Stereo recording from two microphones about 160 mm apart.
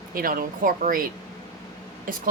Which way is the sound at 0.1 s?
65° right (ahead or behind).